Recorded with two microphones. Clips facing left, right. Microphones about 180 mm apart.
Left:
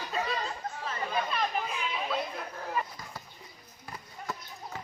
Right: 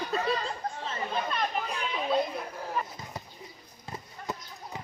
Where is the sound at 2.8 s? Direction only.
10° left (ahead or behind).